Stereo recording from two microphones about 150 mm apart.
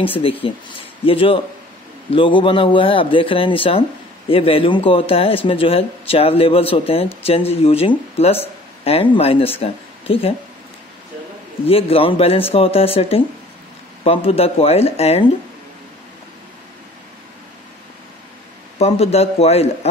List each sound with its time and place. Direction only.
0.0 s a man's voice: 35° left (ahead or behind)
11.6 s a man's voice: 40° left (ahead or behind)
18.8 s a man's voice: 45° left (ahead or behind)